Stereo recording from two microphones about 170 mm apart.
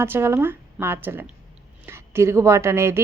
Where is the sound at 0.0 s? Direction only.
15° right (ahead or behind).